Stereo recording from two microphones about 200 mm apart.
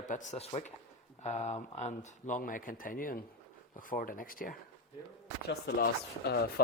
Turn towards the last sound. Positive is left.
turn(degrees=55)  # may be behind; listen again after turning